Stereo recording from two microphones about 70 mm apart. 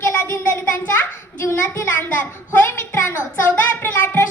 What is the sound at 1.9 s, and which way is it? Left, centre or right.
Child singing, left.